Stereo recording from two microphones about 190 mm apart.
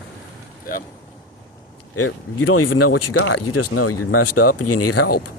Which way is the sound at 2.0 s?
90° left.